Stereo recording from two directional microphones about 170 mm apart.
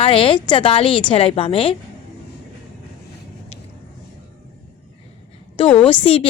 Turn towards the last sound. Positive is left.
turn(degrees=30)  # may be behind; listen again after turning